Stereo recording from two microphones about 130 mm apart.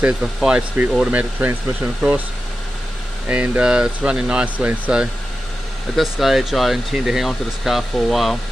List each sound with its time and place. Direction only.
0.0 s speech: 5° right (ahead or behind)
3.3 s speech: 10° right (ahead or behind)
5.9 s speech: centre (ahead or behind)